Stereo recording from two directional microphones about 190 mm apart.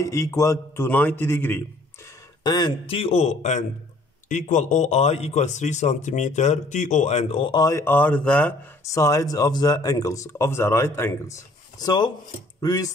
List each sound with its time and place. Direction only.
0.0 s a man's voice: 15° left (ahead or behind)
2.4 s a man's voice: 20° left (ahead or behind)
12.5 s dishes: 20° left (ahead or behind)